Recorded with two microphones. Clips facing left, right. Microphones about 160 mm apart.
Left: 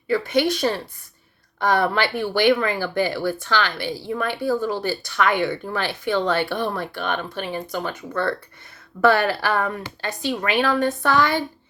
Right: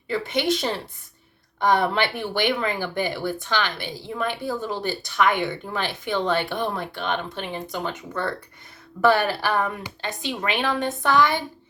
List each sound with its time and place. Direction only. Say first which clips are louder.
0.1 s speech: left 3 dB; 20° right (ahead or behind)